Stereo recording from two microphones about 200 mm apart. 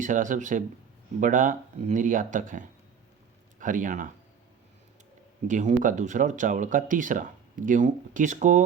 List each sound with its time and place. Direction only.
0.0 s speech: 40° right (ahead or behind)
5.5 s speech: 40° right (ahead or behind)